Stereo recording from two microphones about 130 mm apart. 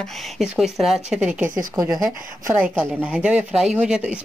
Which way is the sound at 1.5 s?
30° right (ahead or behind).